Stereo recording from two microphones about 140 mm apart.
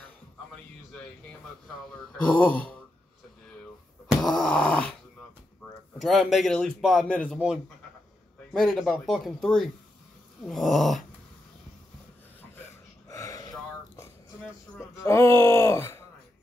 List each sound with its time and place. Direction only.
2.1 s speech: 10° left (ahead or behind)
4.1 s groan: 5° left (ahead or behind)
5.9 s a man's voice: centre (ahead or behind)
8.5 s a man's voice: centre (ahead or behind)
13.1 s gasp: 25° left (ahead or behind)
14.8 s speech: 20° left (ahead or behind)